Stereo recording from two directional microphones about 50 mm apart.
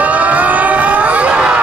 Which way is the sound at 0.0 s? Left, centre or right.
Right.